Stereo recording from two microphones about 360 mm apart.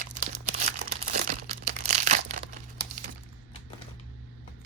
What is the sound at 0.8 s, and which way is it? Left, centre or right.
Crumpling, right.